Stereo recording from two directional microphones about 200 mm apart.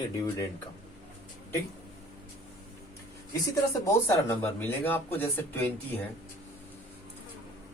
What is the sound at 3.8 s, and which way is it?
Speech, 15° left (ahead or behind).